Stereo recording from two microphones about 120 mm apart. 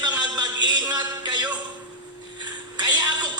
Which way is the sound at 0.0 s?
35° right (ahead or behind).